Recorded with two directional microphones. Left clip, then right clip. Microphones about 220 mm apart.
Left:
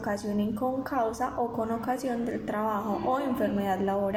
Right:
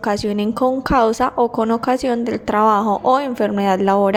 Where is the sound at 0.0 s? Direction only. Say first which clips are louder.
Right 11 dB; 45° right (ahead or behind).